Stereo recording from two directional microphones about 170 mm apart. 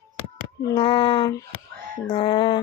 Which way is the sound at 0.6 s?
25° left (ahead or behind).